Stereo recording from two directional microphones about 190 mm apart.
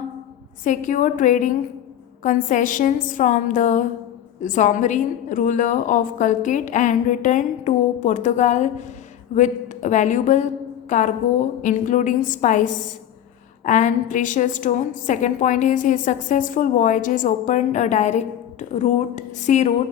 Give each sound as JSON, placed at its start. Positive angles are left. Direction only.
{"t": 0.6, "sound": "a woman's voice", "side_deg": 45}
{"t": 13.7, "sound": "a woman's voice", "side_deg": 40}